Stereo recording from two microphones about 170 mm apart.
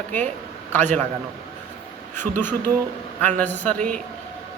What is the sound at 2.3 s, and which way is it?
A man's voice, 10° left (ahead or behind).